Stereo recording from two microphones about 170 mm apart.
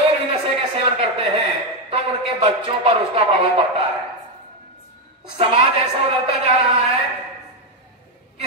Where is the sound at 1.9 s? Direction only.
35° right (ahead or behind).